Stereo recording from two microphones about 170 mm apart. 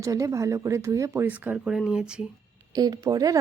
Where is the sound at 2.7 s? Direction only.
20° right (ahead or behind).